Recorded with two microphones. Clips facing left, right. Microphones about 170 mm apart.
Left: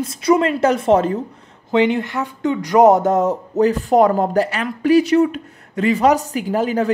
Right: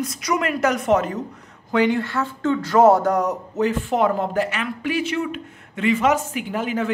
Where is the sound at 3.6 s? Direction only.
40° left (ahead or behind).